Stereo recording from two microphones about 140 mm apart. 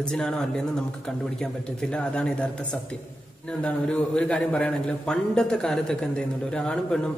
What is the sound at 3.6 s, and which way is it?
A man's voice, 10° left (ahead or behind).